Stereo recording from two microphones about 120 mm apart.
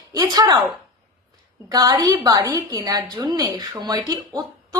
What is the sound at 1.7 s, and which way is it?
A woman's voice, 30° right (ahead or behind).